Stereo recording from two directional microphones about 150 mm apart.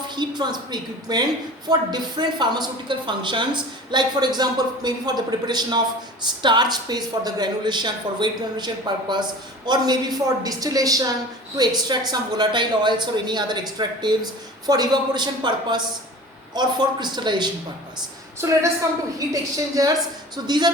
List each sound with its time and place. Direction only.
0.2 s a woman's voice: 30° right (ahead or behind)
18.3 s a woman's voice: 20° right (ahead or behind)